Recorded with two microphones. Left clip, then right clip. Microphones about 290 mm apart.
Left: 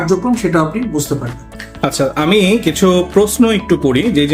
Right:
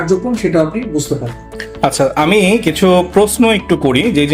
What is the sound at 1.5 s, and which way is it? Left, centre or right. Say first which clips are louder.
Speech: right 3 dB; centre.